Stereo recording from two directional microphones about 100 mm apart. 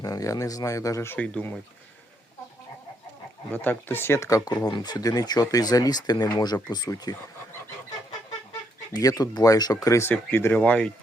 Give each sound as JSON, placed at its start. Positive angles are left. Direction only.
{"t": 0.0, "sound": "speech", "side_deg": 35}
{"t": 1.1, "sound": "speech", "side_deg": 15}
{"t": 3.5, "sound": "speech", "side_deg": 20}
{"t": 8.9, "sound": "speech", "side_deg": 35}
{"t": 10.1, "sound": "speech", "side_deg": 20}